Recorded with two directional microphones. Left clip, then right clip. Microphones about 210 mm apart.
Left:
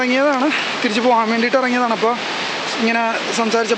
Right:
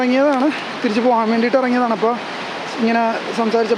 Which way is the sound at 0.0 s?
15° right (ahead or behind).